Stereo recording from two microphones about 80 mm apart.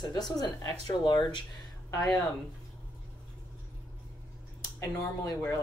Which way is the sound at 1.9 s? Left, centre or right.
Left.